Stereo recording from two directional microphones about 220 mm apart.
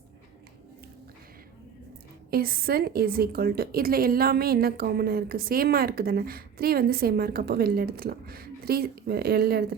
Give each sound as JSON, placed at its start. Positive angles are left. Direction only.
{"t": 2.3, "sound": "a woman's voice", "side_deg": -45}